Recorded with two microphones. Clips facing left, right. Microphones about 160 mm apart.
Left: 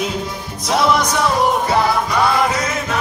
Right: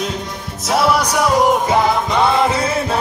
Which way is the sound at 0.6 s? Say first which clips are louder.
Even; 5° right (ahead or behind).